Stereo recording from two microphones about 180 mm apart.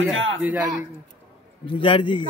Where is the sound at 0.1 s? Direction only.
90° right.